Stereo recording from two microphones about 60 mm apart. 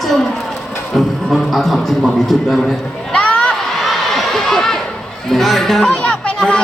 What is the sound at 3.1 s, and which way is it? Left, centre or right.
Crowd, centre.